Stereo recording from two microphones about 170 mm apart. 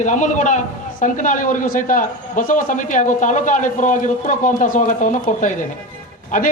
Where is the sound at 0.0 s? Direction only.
45° left (ahead or behind).